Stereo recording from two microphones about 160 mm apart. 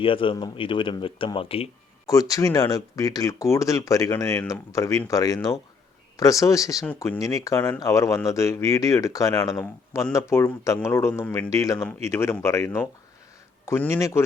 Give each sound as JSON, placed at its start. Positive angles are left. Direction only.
{"t": 0.0, "sound": "speech", "side_deg": 35}
{"t": 2.0, "sound": "speech", "side_deg": 20}
{"t": 6.8, "sound": "speech", "side_deg": 10}
{"t": 7.2, "sound": "speech", "side_deg": 20}